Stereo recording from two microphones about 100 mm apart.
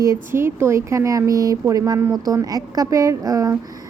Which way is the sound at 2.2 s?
35° right (ahead or behind).